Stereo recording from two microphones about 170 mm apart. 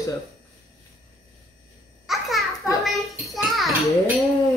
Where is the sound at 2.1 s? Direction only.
Centre (ahead or behind).